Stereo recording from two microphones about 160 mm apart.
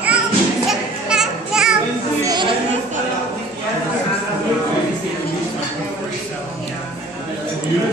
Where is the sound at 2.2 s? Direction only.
25° right (ahead or behind).